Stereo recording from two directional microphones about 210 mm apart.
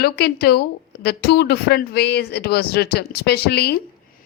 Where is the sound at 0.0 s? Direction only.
50° left (ahead or behind).